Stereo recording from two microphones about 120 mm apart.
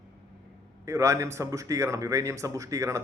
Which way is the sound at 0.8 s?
25° right (ahead or behind).